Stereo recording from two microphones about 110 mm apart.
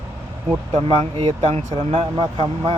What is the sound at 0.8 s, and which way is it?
Speech, 50° right (ahead or behind).